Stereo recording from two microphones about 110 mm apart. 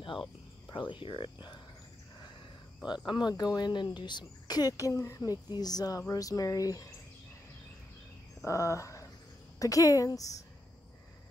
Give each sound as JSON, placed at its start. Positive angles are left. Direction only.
{"t": 0.7, "sound": "speech", "side_deg": 45}
{"t": 3.1, "sound": "speech", "side_deg": 40}
{"t": 8.5, "sound": "a sound", "side_deg": 30}
{"t": 9.6, "sound": "speech", "side_deg": 30}